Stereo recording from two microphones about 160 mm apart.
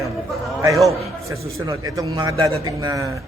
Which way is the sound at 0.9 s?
20° right (ahead or behind).